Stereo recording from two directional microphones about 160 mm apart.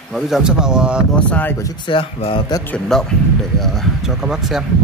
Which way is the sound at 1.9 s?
30° left (ahead or behind).